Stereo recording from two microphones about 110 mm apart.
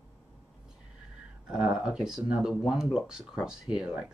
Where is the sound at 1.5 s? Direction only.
5° right (ahead or behind).